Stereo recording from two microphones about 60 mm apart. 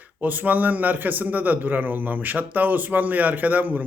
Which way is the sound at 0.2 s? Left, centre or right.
Right.